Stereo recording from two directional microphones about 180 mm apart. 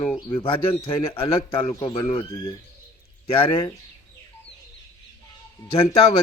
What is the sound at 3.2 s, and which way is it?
Speech, 30° left (ahead or behind).